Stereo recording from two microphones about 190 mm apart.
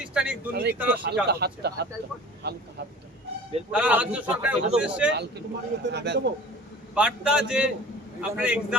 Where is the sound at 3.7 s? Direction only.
5° right (ahead or behind).